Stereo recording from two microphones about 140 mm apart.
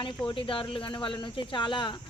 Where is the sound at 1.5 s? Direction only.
35° left (ahead or behind).